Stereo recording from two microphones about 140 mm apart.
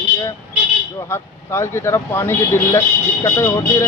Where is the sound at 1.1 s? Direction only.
20° left (ahead or behind).